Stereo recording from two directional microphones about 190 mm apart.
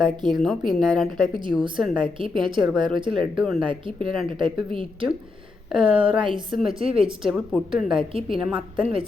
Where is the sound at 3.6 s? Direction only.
25° right (ahead or behind).